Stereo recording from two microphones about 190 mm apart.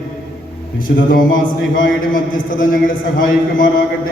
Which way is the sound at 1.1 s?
45° left (ahead or behind).